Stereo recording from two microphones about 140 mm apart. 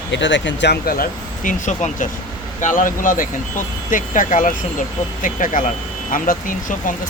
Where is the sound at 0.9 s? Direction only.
90° left.